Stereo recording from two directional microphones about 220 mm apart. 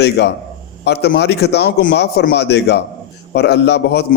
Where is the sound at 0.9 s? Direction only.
50° left (ahead or behind).